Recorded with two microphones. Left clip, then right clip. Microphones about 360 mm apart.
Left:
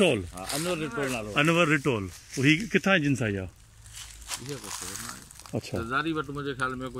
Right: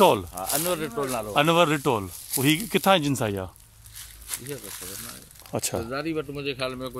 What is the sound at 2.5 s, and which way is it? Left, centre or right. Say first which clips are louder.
Speech: right 5 dB; right.